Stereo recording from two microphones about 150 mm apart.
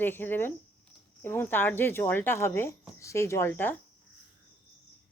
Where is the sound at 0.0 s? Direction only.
15° left (ahead or behind).